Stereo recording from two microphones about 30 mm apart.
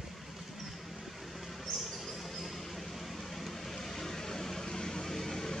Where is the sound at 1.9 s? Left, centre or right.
Centre.